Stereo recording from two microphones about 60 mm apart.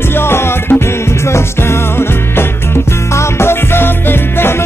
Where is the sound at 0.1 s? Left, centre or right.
Left.